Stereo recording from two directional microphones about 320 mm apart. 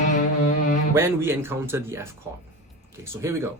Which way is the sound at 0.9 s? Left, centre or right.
Centre.